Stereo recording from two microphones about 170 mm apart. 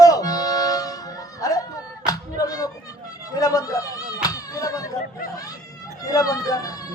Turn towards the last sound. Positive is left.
turn(degrees=20)  # may be behind; listen again after turning